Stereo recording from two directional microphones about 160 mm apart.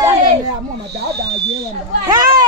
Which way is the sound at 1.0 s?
90° right.